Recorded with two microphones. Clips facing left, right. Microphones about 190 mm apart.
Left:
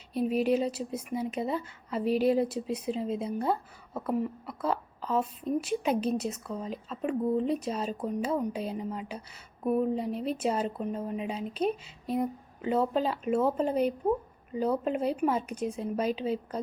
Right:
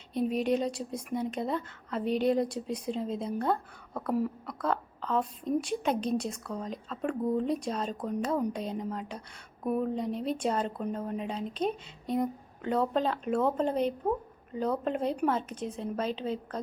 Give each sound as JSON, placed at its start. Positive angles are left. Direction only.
{"t": 0.1, "sound": "a woman's voice", "side_deg": 5}